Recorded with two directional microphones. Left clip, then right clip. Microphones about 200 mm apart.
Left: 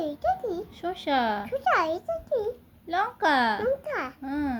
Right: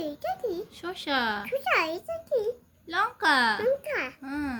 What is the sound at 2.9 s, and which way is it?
Speech, 40° right (ahead or behind).